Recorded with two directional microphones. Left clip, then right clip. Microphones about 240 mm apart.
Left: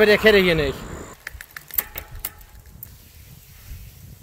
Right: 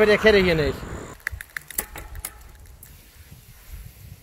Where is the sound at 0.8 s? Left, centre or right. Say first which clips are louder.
Even; left.